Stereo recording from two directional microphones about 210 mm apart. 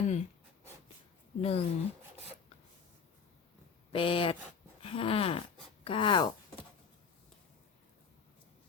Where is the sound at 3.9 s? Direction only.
25° left (ahead or behind).